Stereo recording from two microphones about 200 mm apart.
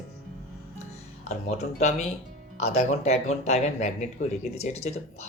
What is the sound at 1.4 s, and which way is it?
Speech, 35° left (ahead or behind).